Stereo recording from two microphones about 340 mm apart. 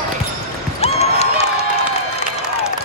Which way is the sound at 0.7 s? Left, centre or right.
Centre.